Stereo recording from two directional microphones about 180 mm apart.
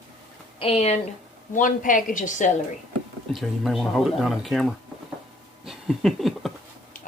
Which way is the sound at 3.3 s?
Centre (ahead or behind).